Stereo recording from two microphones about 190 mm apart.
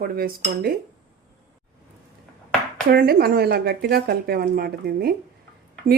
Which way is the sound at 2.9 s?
50° right (ahead or behind).